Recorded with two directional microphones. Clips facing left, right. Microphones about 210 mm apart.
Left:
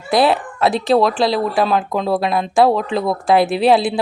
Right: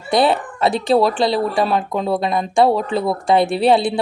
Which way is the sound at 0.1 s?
Centre (ahead or behind).